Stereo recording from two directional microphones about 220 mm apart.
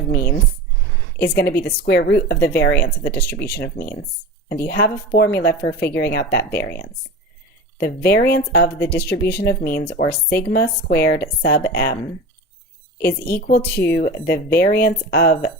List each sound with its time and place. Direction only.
0.1 s a sound: 40° left (ahead or behind)
1.2 s speech: 50° left (ahead or behind)
7.8 s speech: 45° left (ahead or behind)
9.8 s speech: 30° left (ahead or behind)
10.5 s speech: 45° left (ahead or behind)
13.1 s speech: 45° left (ahead or behind)